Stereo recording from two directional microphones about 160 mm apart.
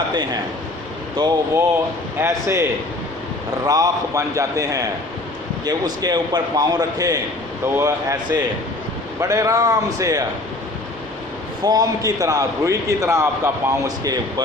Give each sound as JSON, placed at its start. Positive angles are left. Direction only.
{"t": 1.2, "sound": "a man's voice", "side_deg": -25}
{"t": 3.7, "sound": "a man's voice", "side_deg": -20}
{"t": 11.6, "sound": "a man's voice", "side_deg": -25}